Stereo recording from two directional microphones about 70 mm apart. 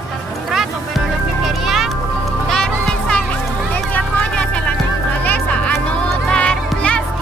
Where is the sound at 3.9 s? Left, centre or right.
Centre.